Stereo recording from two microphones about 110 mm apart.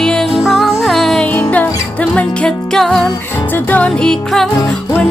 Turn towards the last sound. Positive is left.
turn(degrees=5)  # may be behind; listen again after turning